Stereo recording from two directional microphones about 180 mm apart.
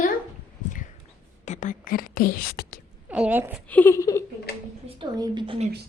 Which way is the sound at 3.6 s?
10° left (ahead or behind).